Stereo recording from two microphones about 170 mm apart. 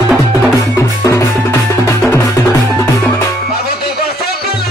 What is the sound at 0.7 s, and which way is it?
Music, 15° left (ahead or behind).